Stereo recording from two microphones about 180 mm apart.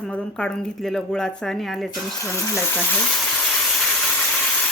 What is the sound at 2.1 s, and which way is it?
Speech, 15° left (ahead or behind).